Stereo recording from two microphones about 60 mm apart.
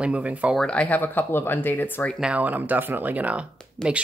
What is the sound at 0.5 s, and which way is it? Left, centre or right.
Speech, centre.